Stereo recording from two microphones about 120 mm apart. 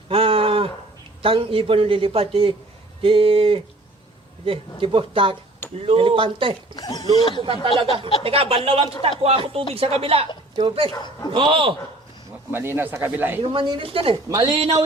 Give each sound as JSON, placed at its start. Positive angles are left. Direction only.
{"t": 0.1, "sound": "a sound", "side_deg": -50}
{"t": 1.2, "sound": "speech", "side_deg": -50}
{"t": 6.7, "sound": "speech", "side_deg": 35}
{"t": 7.4, "sound": "speech", "side_deg": -50}
{"t": 10.5, "sound": "speech", "side_deg": -45}
{"t": 10.9, "sound": "speech", "side_deg": 35}
{"t": 11.3, "sound": "speech", "side_deg": -45}
{"t": 12.5, "sound": "speech", "side_deg": -20}
{"t": 13.4, "sound": "speech", "side_deg": -45}
{"t": 14.3, "sound": "speech", "side_deg": -25}
{"t": 14.5, "sound": "speech", "side_deg": -50}